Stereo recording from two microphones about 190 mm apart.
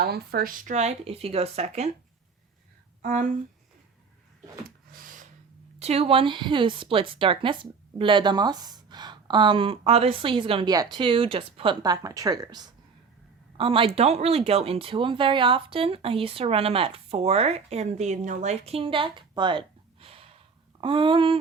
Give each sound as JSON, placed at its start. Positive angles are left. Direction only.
{"t": 0.0, "sound": "speech", "side_deg": -55}
{"t": 3.0, "sound": "speech", "side_deg": -40}
{"t": 4.9, "sound": "a sound", "side_deg": -45}
{"t": 5.8, "sound": "speech", "side_deg": -30}